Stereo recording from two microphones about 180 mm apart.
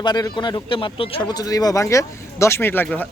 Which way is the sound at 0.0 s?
25° left (ahead or behind).